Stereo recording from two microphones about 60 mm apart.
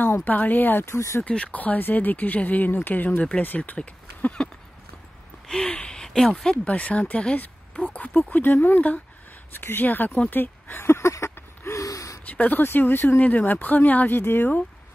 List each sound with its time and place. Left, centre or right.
0.0 s speech: left
0.8 s speech: left
1.2 s speech: left
5.5 s speech: centre
6.7 s speech: left
9.5 s a sound: left
11.8 s gasp: left
12.3 s speech: left